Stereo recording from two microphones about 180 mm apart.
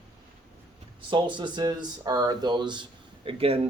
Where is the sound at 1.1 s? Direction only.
25° right (ahead or behind).